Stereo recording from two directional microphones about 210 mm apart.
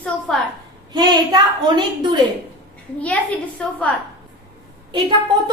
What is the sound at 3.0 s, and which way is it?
Speech, 5° left (ahead or behind).